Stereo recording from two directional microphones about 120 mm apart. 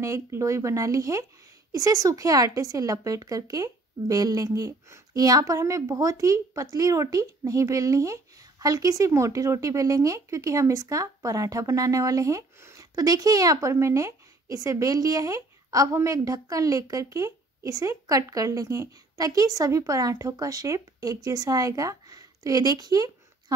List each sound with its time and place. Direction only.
0.0 s a woman's voice: 25° right (ahead or behind)